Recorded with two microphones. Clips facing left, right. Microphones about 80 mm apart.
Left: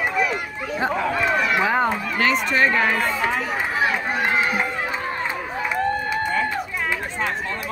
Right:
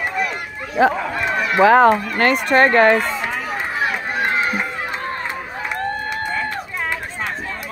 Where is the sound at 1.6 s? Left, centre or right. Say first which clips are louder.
Right 9 dB; right.